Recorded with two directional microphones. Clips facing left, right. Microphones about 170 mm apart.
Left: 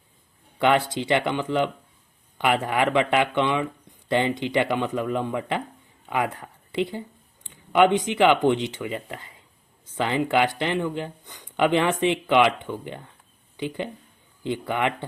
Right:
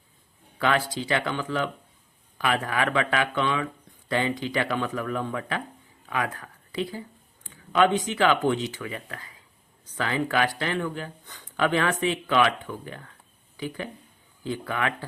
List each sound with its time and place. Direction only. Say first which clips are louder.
0.6 s speech: left 4 dB; 20° left (ahead or behind)